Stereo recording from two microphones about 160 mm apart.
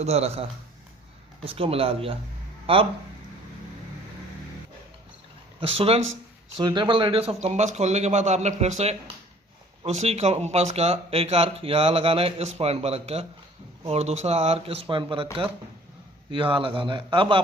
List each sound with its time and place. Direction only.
0.0 s speech: 40° right (ahead or behind)
1.5 s speech: 35° right (ahead or behind)
5.5 s a man's voice: 35° right (ahead or behind)